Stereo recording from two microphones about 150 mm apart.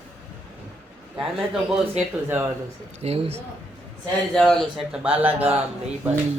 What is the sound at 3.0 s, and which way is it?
Speech, 40° right (ahead or behind).